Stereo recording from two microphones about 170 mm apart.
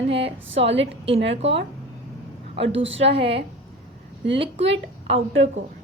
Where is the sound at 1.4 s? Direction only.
35° right (ahead or behind).